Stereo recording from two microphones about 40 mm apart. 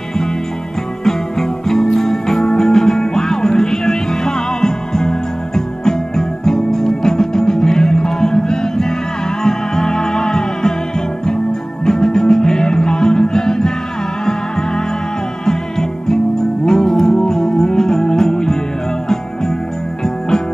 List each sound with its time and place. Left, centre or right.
1.7 s music: centre
11.8 s music: centre
15.4 s music: centre